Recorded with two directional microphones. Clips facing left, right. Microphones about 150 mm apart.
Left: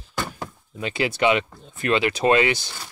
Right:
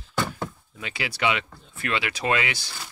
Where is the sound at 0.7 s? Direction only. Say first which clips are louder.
Left 8 dB; 25° left (ahead or behind).